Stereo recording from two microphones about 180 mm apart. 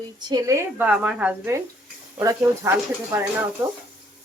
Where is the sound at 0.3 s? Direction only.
15° right (ahead or behind).